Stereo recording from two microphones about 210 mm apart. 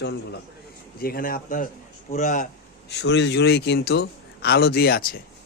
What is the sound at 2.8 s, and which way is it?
Speech, 55° left (ahead or behind).